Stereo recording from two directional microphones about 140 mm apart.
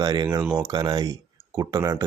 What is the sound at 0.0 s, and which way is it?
Speech, 30° right (ahead or behind).